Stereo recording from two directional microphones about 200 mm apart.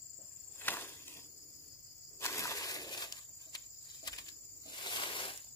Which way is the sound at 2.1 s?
15° left (ahead or behind).